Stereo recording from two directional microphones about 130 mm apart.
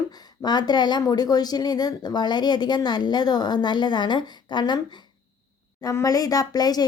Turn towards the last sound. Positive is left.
turn(degrees=30)  # may be behind; listen again after turning